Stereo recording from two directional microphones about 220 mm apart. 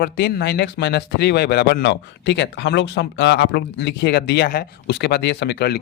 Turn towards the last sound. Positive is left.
turn(degrees=45)  # may be behind; listen again after turning